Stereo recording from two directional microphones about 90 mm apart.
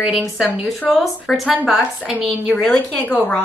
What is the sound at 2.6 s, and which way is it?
Speech, 10° left (ahead or behind).